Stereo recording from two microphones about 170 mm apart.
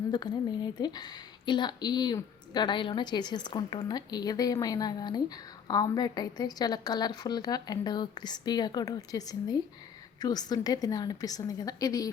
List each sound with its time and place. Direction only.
0.1 s a woman's voice: 25° left (ahead or behind)